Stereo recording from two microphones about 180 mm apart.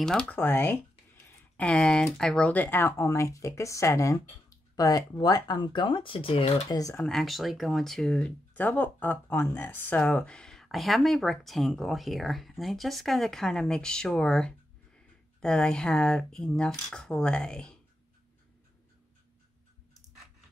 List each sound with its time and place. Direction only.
0.0 s speech: 5° left (ahead or behind); by 6.6 s 30° left (ahead or behind)
6.7 s speech: 20° left (ahead or behind)
7.0 s speech: centre (ahead or behind)